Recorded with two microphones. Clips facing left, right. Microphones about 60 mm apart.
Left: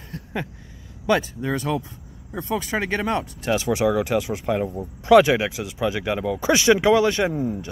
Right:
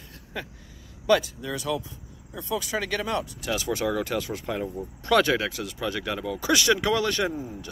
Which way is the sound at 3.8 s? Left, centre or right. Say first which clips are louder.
Left 7 dB; centre.